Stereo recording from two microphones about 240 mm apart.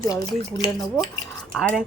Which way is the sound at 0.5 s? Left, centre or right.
Centre.